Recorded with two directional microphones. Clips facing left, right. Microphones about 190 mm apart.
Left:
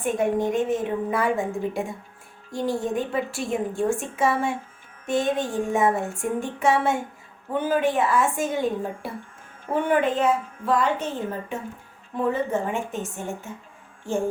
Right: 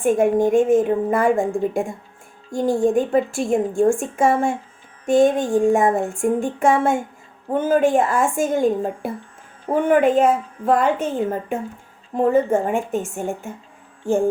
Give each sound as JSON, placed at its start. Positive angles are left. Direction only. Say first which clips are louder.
{"t": 0.0, "sound": "a woman's voice", "louder": "right 6 dB", "side_deg": -50}